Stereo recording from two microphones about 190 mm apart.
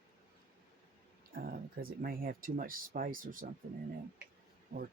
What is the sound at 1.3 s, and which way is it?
Speech, 50° right (ahead or behind).